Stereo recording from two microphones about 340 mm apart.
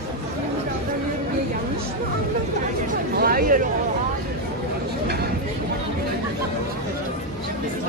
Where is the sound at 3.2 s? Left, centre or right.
Right.